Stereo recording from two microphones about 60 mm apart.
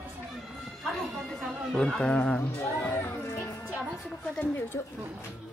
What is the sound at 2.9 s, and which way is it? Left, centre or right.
Music, left.